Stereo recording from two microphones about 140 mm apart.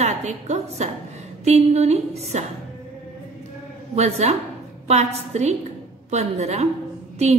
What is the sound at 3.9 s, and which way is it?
A woman's voice, 50° right (ahead or behind).